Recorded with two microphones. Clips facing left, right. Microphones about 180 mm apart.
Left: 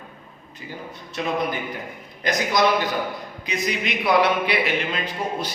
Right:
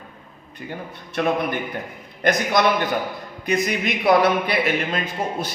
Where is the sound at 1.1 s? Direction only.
55° right (ahead or behind).